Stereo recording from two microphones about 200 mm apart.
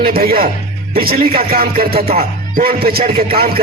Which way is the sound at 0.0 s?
50° right (ahead or behind).